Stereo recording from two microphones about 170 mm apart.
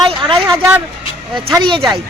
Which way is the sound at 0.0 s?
30° right (ahead or behind).